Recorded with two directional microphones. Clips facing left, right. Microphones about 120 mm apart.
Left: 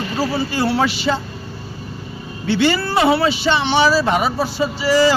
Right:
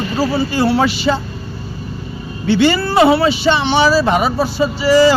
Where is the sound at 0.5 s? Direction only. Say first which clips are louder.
Right 3 dB; 25° right (ahead or behind).